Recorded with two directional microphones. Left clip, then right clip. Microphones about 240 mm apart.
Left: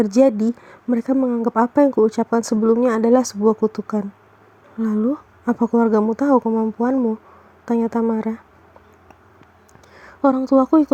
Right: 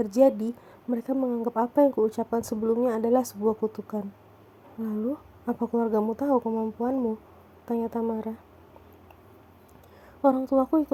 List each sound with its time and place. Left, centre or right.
0.0 s speech: left
6.4 s speech: left
6.7 s speech: left
10.0 s speech: left